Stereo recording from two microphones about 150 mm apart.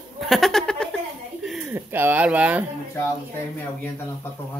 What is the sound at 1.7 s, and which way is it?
Speech, 15° right (ahead or behind).